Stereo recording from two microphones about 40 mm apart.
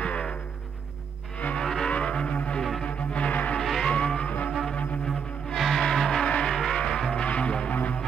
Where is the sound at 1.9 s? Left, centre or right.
Left.